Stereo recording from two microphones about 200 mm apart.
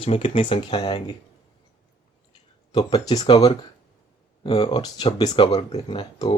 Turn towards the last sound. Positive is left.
turn(degrees=25)  # may be behind; listen again after turning